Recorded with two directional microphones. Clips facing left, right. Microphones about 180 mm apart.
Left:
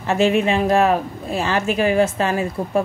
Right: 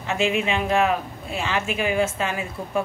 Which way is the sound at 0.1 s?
35° left (ahead or behind).